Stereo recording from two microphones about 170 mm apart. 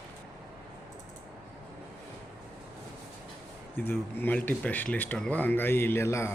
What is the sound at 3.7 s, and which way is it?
Speech, 10° left (ahead or behind).